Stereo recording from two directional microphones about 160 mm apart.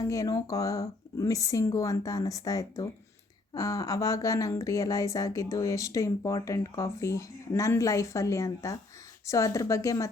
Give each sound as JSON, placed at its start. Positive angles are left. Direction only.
{"t": 0.0, "sound": "speech", "side_deg": 20}